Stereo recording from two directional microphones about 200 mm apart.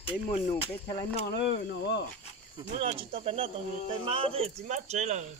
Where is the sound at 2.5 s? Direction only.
30° right (ahead or behind).